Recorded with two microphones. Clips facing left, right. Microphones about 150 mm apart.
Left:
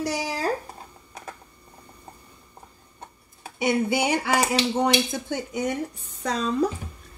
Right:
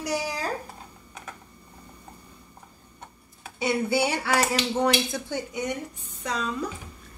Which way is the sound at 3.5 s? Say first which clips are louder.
Left 2 dB; 20° left (ahead or behind).